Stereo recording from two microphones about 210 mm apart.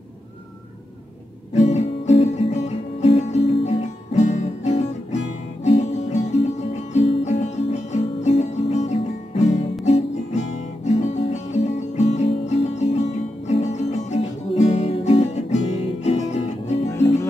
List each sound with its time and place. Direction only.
1.5 s music: 30° left (ahead or behind)
9.8 s guitar: 30° left (ahead or behind)
14.7 s music: 30° left (ahead or behind)